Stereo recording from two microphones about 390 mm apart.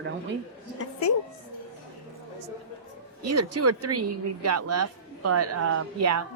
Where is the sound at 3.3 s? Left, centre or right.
Right.